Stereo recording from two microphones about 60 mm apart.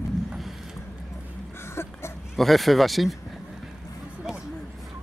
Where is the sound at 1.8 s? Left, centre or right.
Left.